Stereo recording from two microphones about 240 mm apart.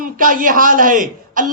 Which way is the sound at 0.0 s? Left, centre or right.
Right.